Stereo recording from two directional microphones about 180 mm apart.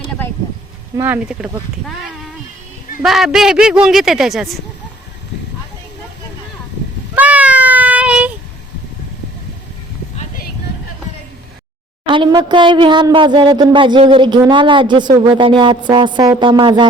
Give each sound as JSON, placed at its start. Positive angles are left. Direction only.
{"t": 0.9, "sound": "speech", "side_deg": -10}
{"t": 3.0, "sound": "speech", "side_deg": 0}
{"t": 7.2, "sound": "child singing", "side_deg": -10}
{"t": 12.0, "sound": "speech", "side_deg": -25}